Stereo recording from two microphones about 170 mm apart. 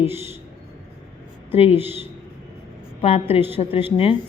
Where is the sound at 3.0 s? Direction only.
35° left (ahead or behind).